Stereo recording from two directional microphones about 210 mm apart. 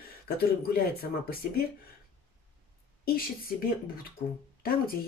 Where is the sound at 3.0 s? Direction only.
45° left (ahead or behind).